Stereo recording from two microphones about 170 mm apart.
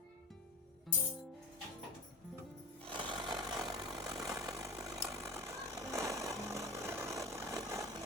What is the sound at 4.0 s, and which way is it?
Vehicle, 20° right (ahead or behind).